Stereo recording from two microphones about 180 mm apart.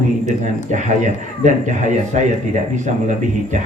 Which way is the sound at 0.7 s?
40° right (ahead or behind).